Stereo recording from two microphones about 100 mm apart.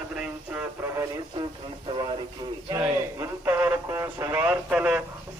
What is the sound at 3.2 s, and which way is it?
Speech, 20° right (ahead or behind).